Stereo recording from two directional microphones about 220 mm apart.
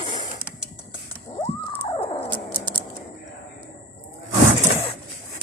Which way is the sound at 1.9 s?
25° left (ahead or behind).